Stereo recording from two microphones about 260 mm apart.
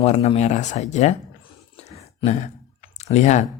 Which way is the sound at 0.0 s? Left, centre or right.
Left.